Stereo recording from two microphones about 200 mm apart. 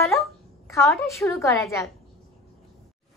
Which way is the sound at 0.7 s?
15° left (ahead or behind).